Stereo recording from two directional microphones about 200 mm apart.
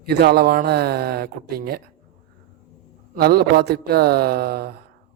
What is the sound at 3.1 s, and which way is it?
A man's voice, 50° right (ahead or behind).